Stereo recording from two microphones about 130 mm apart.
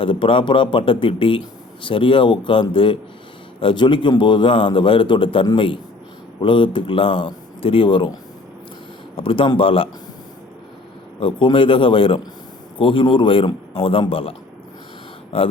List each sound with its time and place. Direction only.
0.0 s a man's voice: 40° left (ahead or behind)
11.2 s a man's voice: 40° left (ahead or behind)